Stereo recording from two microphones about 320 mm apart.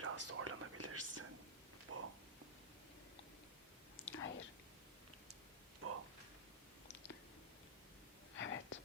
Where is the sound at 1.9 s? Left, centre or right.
Right.